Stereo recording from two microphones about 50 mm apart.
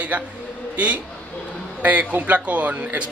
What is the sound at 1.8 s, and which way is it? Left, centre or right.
Speech, right.